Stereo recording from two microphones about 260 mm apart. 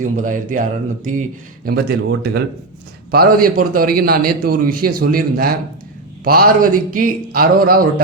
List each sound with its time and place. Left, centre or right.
0.0 s a man's voice: right